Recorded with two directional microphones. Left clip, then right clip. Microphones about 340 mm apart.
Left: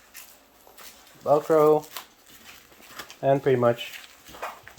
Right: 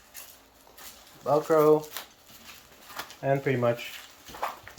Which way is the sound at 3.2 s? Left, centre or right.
Left.